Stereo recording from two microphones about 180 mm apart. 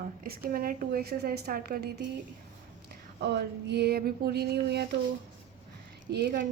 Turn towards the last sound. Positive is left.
turn(degrees=-55)  # may be behind; listen again after turning